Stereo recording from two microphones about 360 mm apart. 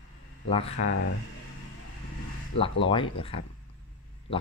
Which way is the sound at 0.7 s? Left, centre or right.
Left.